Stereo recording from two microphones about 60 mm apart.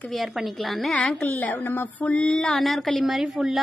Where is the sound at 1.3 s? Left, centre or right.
Left.